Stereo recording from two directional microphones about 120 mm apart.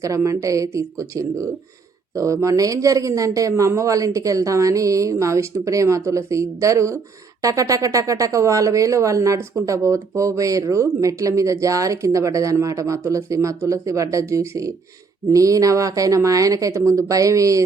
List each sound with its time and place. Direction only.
0.0 s speech: 25° right (ahead or behind)